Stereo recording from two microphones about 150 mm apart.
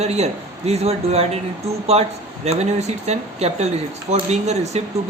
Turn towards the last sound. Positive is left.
turn(degrees=-45)  # may be behind; listen again after turning